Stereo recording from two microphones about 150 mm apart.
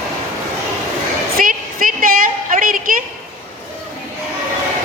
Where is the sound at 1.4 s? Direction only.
70° right (ahead or behind).